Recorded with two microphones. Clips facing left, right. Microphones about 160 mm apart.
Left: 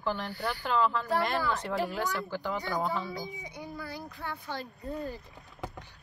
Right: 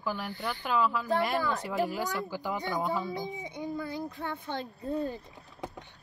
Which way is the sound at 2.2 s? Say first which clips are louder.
Even; 15° right (ahead or behind).